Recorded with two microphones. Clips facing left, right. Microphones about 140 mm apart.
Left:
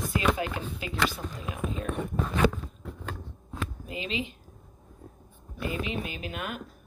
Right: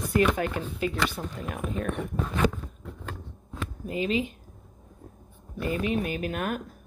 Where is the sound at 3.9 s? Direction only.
45° right (ahead or behind).